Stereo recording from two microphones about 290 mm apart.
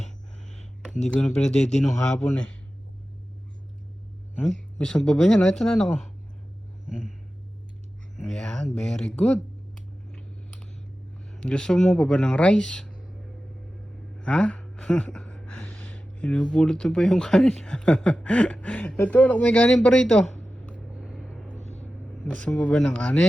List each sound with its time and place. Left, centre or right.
0.0 s a sound: left
1.4 s speech: centre
4.4 s speech: centre
8.3 s speech: centre
10.1 s a sound: centre
11.3 s speech: centre
14.2 s a woman's voice: centre
21.6 s vehicle: left
22.2 s speech: centre